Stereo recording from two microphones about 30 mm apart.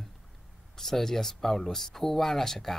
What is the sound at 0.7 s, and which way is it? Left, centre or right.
Speech, centre.